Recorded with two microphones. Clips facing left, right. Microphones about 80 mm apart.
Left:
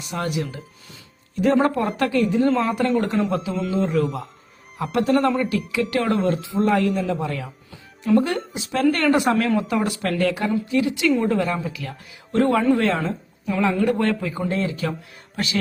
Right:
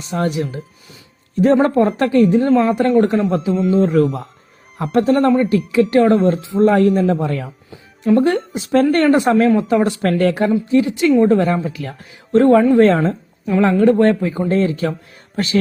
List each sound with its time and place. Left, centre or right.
0.0 s speech: right
2.5 s a man's voice: right
3.7 s a man's voice: right
10.7 s a man's voice: right